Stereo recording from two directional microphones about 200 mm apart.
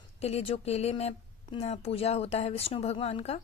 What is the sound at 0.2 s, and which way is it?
Speech, 30° left (ahead or behind).